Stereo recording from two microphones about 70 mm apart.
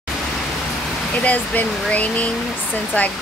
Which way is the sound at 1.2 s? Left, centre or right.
Centre.